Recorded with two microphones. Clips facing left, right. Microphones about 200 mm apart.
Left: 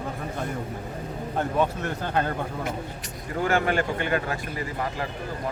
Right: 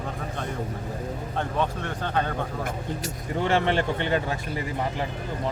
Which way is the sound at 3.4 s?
25° right (ahead or behind).